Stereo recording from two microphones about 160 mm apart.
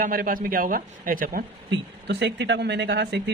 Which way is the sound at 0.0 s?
60° right (ahead or behind).